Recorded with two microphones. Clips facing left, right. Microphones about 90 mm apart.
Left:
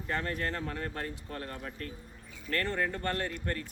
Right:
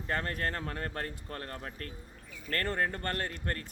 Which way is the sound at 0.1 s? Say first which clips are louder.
Even; 45° right (ahead or behind).